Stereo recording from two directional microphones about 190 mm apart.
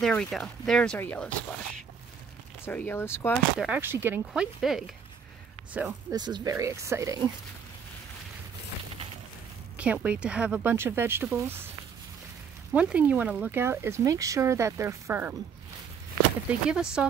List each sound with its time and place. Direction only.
0.0 s speech: 5° left (ahead or behind)
2.6 s speech: 10° left (ahead or behind)
3.5 s speech: 5° right (ahead or behind)
6.1 s speech: 20° right (ahead or behind)
9.8 s speech: 5° right (ahead or behind)
12.7 s speech: 5° right (ahead or behind)
16.6 s speech: 5° right (ahead or behind)